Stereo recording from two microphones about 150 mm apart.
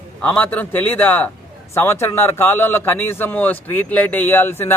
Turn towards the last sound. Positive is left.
turn(degrees=15)  # may be behind; listen again after turning